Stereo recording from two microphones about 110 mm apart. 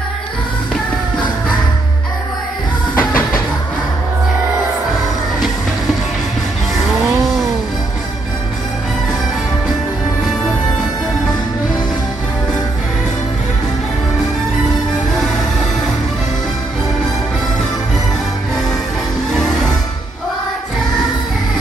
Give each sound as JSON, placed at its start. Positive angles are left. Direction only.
{"t": 3.0, "sound": "music", "side_deg": 15}
{"t": 19.3, "sound": "music", "side_deg": 5}